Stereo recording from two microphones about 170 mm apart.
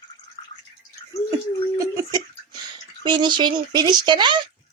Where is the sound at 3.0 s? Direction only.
25° right (ahead or behind).